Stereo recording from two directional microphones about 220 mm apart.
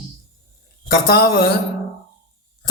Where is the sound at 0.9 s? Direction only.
45° left (ahead or behind).